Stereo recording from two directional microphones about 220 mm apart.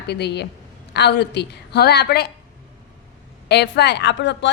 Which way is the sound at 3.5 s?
50° left (ahead or behind).